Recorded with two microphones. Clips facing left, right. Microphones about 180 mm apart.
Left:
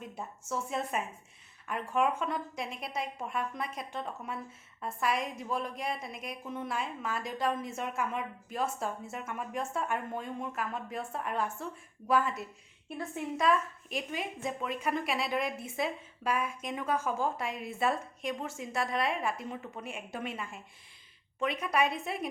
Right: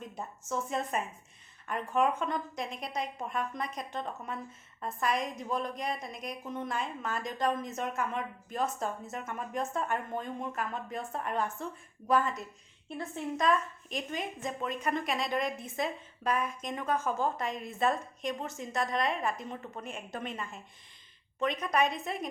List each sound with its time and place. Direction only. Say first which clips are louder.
0.0 s a woman's voice: even; 5° left (ahead or behind)